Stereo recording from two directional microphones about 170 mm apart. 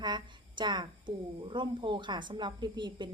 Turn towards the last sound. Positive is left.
turn(degrees=-25)  # may be behind; listen again after turning